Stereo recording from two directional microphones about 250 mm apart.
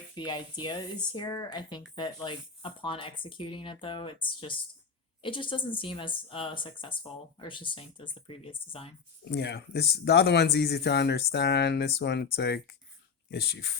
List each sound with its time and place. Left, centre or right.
0.3 s speech: centre
9.3 s speech: left